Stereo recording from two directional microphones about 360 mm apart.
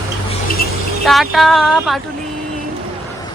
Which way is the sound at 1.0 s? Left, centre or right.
Centre.